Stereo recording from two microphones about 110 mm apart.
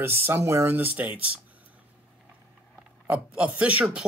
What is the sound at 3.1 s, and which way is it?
Speech, 10° right (ahead or behind).